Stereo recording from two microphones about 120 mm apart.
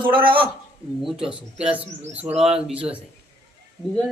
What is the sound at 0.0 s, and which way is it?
Speech, 45° right (ahead or behind).